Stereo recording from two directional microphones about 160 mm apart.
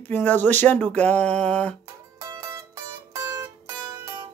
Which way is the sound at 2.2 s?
20° right (ahead or behind).